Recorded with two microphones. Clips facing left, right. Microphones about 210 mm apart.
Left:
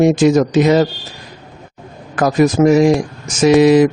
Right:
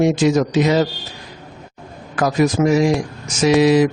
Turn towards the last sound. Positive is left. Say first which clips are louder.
# left 4 dB
turn(degrees=50)  # may be behind; listen again after turning